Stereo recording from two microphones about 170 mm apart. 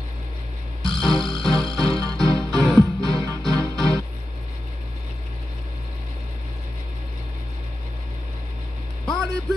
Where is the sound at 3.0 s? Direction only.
20° right (ahead or behind).